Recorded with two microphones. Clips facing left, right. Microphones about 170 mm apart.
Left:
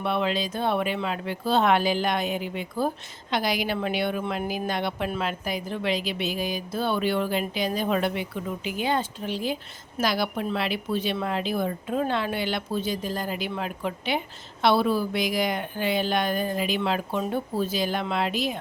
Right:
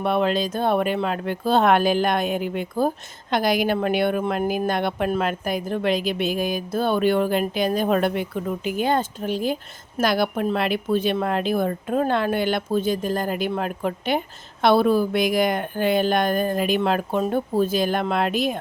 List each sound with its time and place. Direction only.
0.0 s speech: 45° right (ahead or behind)